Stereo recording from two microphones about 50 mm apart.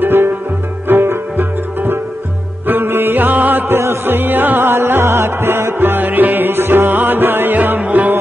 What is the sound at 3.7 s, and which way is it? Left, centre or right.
Music, right.